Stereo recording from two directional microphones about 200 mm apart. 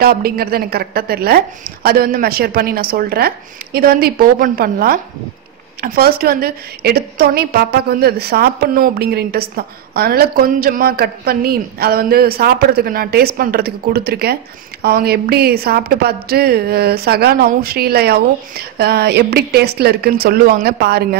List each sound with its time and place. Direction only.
0.0 s a woman's voice: 50° right (ahead or behind)